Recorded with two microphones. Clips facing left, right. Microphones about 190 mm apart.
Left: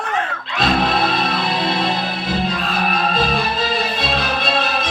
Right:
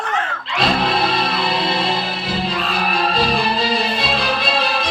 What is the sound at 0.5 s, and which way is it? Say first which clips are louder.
Music: left 1 dB; 50° left (ahead or behind).